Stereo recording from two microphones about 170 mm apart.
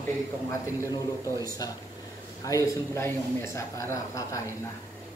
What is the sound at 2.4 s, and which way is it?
Speech, 20° left (ahead or behind).